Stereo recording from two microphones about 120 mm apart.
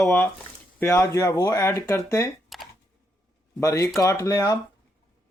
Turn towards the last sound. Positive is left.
turn(degrees=30)  # may be behind; listen again after turning